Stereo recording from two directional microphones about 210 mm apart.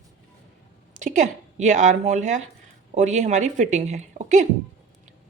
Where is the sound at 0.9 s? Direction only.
35° right (ahead or behind).